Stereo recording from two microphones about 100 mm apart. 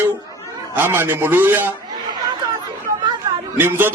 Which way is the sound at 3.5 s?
20° right (ahead or behind).